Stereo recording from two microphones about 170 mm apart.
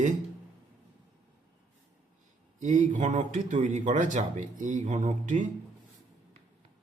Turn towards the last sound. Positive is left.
turn(degrees=-45)  # may be behind; listen again after turning